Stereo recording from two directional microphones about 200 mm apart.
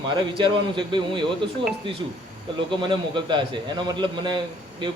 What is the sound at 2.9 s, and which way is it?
A man's voice, 25° right (ahead or behind).